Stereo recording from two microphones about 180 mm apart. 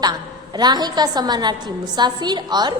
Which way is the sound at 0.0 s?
25° right (ahead or behind).